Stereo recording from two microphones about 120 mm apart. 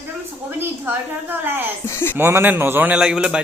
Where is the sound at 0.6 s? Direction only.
15° right (ahead or behind).